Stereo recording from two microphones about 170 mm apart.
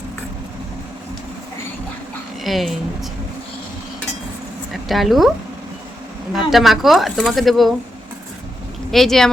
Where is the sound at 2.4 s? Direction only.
Centre (ahead or behind).